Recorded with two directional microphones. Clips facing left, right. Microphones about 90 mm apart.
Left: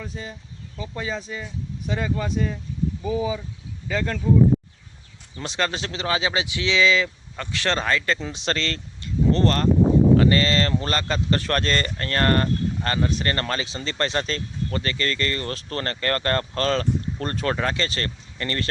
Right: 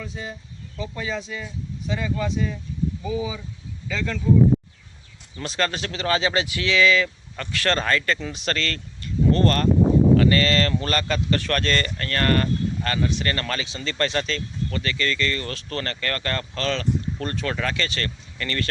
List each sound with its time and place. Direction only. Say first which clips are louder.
0.8 s speech: right 1 dB; 30° left (ahead or behind)
1.9 s speech: even; 40° left (ahead or behind)
5.4 s speech: even; 20° left (ahead or behind)